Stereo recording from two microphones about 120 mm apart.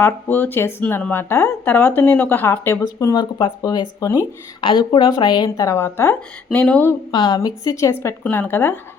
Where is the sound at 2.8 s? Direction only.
30° left (ahead or behind); by 6.9 s 15° left (ahead or behind).